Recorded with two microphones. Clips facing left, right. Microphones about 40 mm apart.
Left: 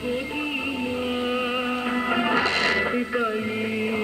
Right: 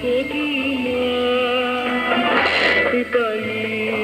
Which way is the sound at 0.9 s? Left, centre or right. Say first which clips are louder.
Right 8 dB; right.